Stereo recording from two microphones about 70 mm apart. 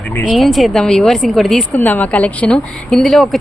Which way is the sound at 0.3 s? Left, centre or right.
Centre.